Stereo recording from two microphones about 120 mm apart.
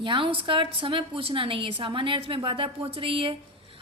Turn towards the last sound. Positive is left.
turn(degrees=-50)  # may be behind; listen again after turning